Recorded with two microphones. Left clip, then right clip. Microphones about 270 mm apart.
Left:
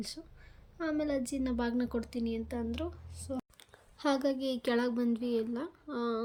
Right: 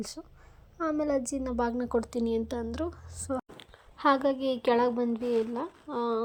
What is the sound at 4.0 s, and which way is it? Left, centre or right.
Speech, centre.